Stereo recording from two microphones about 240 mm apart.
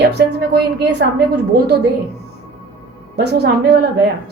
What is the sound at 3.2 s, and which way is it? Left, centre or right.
Speech, right.